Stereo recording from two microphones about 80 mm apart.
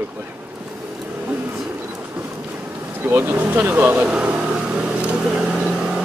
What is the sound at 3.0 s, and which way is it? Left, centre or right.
Speech, right.